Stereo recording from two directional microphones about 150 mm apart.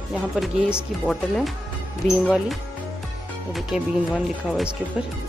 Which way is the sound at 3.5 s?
Centre (ahead or behind).